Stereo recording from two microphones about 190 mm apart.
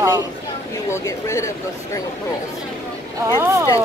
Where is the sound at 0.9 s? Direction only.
15° left (ahead or behind).